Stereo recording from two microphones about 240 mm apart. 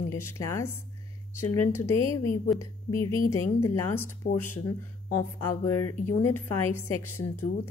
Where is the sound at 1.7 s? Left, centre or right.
Centre.